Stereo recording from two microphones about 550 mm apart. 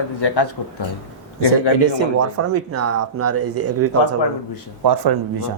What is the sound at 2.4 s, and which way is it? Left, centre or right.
Speech, right.